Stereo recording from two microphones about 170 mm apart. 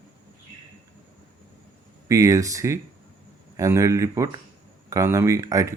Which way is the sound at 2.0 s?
20° right (ahead or behind).